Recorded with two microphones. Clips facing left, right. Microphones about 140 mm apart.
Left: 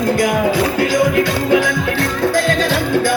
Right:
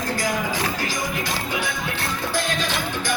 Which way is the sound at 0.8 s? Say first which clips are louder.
Left 13 dB; 70° left (ahead or behind).